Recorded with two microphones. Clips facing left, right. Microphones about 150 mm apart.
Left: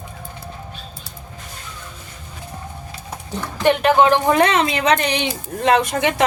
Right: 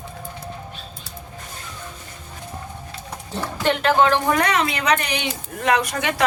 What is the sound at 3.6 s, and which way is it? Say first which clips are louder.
Speech: left 4 dB; 15° left (ahead or behind).